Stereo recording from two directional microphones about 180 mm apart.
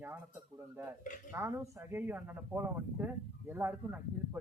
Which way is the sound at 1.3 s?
15° right (ahead or behind).